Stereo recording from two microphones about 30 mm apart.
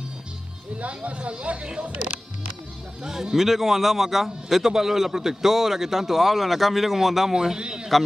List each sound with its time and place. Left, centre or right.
0.7 s speech: right
3.0 s speech: right
3.3 s a man's voice: centre
7.5 s a man's voice: right